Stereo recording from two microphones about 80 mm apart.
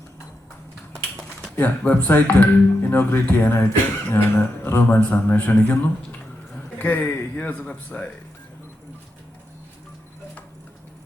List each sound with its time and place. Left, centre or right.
1.5 s speech: centre
3.5 s speech: left; by 8.1 s centre